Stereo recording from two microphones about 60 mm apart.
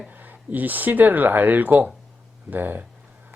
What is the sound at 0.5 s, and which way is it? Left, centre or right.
Speech, right.